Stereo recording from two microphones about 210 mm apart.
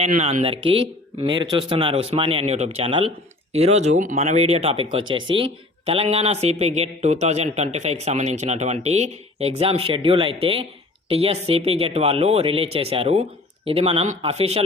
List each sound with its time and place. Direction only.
0.0 s a man's voice: 30° right (ahead or behind)